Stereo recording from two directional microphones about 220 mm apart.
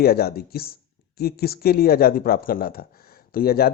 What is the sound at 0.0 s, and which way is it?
Speech, 45° left (ahead or behind).